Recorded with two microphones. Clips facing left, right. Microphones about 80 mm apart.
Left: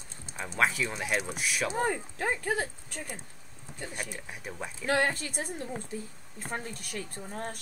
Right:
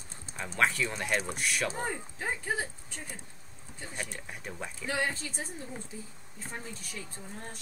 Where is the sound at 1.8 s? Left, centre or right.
Left.